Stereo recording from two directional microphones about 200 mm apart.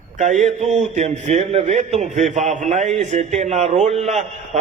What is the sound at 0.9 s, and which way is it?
A man's voice, 35° right (ahead or behind).